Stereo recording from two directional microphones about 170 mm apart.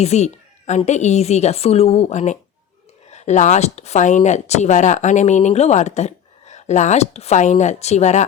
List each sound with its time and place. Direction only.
0.0 s a woman's voice: 40° left (ahead or behind)